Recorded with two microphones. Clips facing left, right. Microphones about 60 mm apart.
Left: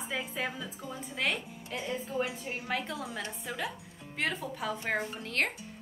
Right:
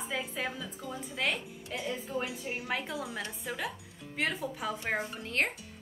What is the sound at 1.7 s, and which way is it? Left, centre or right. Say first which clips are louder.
A woman's voice: even; centre.